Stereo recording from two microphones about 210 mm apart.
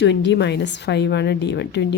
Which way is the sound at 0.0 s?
55° left (ahead or behind).